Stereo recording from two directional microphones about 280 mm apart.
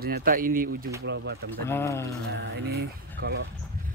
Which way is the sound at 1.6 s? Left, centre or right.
Centre.